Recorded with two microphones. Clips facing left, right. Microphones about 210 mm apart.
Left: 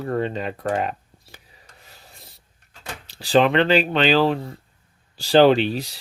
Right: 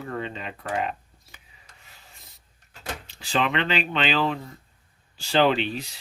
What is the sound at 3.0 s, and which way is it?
Speech, 35° left (ahead or behind).